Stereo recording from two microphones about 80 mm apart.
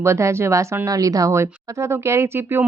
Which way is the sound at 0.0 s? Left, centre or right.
Right.